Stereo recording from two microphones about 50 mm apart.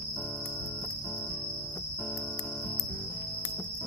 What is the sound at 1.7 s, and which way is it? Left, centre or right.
Cricket, left.